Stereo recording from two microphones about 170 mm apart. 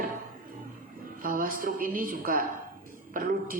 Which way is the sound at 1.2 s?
55° right (ahead or behind).